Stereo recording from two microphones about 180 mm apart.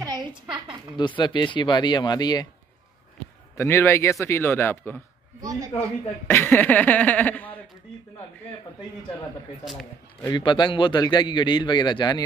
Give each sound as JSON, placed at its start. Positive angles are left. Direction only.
{"t": 0.0, "sound": "a woman's voice", "side_deg": -25}
{"t": 0.9, "sound": "a man's voice", "side_deg": 25}
{"t": 3.5, "sound": "a man's voice", "side_deg": 15}
{"t": 5.4, "sound": "speech", "side_deg": -20}
{"t": 6.2, "sound": "a man's voice", "side_deg": 10}
{"t": 10.2, "sound": "a man's voice", "side_deg": 25}